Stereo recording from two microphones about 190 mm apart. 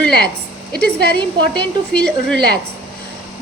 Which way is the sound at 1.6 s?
5° left (ahead or behind).